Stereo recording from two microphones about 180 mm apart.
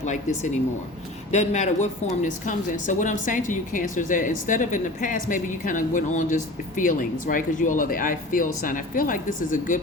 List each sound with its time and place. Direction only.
0.0 s a woman's voice: 40° left (ahead or behind)